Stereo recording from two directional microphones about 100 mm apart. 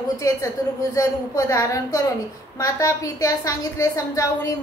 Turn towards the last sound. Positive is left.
turn(degrees=35)  # may be behind; listen again after turning